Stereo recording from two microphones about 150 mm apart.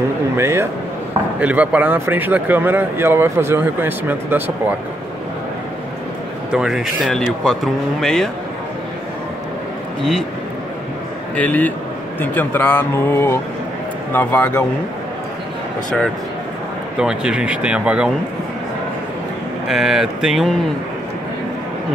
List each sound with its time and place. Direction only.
0.4 s speech: 15° right (ahead or behind)
6.5 s speech: 5° right (ahead or behind)
11.3 s speech: 10° left (ahead or behind)
17.0 s speech: 5° right (ahead or behind)
19.7 s speech: centre (ahead or behind)